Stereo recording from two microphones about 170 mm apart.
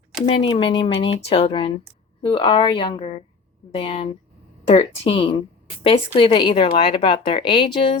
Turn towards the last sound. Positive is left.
turn(degrees=30)  # may be behind; listen again after turning